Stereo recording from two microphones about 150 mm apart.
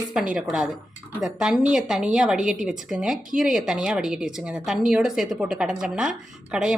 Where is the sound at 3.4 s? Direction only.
5° right (ahead or behind).